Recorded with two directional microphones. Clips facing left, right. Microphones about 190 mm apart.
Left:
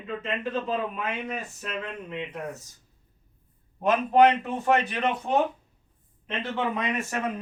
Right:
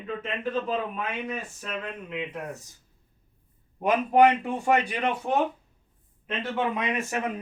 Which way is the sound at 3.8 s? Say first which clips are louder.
Even; 10° right (ahead or behind).